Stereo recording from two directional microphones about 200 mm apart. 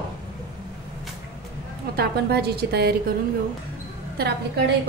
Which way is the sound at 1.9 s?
55° right (ahead or behind).